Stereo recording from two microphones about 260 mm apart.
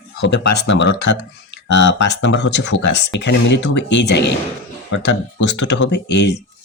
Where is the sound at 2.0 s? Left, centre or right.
Left.